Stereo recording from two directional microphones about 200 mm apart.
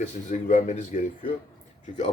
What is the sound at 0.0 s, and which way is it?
Speech, 40° left (ahead or behind).